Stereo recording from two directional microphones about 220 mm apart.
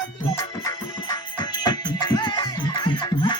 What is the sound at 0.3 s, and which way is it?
Music, 15° left (ahead or behind).